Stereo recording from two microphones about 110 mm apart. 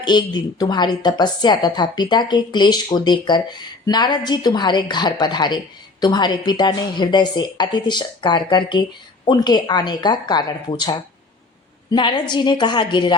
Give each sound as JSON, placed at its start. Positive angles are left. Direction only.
{"t": 0.0, "sound": "a woman's voice", "side_deg": 40}
{"t": 11.9, "sound": "a woman's voice", "side_deg": 45}